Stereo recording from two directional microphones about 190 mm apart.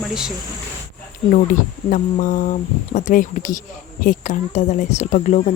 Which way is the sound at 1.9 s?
45° left (ahead or behind).